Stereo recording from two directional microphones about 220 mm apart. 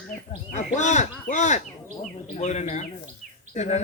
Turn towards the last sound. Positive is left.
turn(degrees=30)  # may be behind; listen again after turning